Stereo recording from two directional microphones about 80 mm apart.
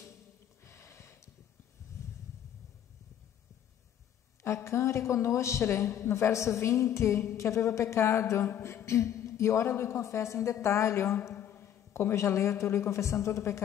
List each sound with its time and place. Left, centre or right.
0.7 s a sound: left
4.4 s a woman's voice: left
8.8 s a woman's voice: left